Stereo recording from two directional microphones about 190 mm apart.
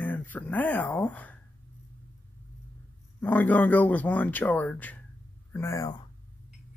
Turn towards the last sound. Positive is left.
turn(degrees=20)  # may be behind; listen again after turning